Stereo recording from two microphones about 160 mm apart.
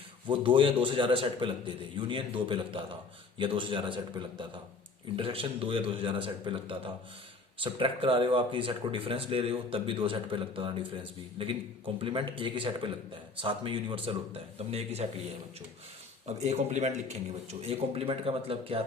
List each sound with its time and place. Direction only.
0.3 s a man's voice: 30° right (ahead or behind)
16.2 s a man's voice: 45° right (ahead or behind)